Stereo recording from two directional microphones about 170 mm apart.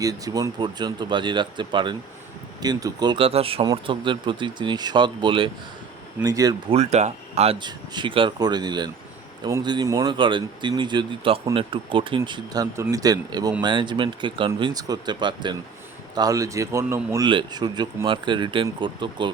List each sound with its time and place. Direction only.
0.0 s speech: 20° right (ahead or behind)
6.7 s speech: 40° right (ahead or behind)
7.6 s speech: 30° right (ahead or behind)